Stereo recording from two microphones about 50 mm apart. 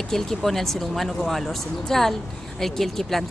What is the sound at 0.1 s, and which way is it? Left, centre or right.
Speech, centre.